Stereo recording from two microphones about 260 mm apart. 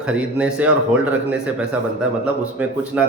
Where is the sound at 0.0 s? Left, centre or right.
Centre.